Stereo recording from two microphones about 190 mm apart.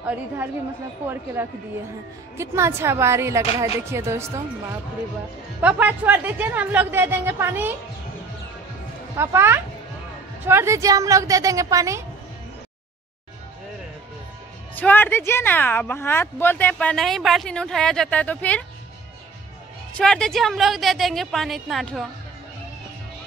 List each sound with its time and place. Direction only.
1.0 s speech: 10° right (ahead or behind)
5.6 s speech: 10° right (ahead or behind)
9.1 s speech: 15° right (ahead or behind)
14.8 s speech: 10° left (ahead or behind)
20.0 s a woman's voice: 5° left (ahead or behind)